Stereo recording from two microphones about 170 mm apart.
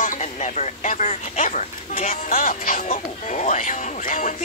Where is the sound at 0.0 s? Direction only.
45° left (ahead or behind).